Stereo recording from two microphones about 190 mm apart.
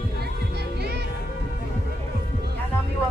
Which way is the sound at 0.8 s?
55° right (ahead or behind).